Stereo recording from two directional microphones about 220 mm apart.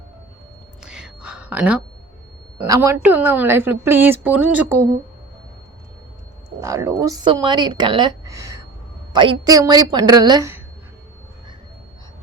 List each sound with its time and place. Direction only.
0.8 s whispering: 5° right (ahead or behind)
2.6 s a woman's voice: 15° right (ahead or behind)
6.6 s a woman's voice: 15° right (ahead or behind)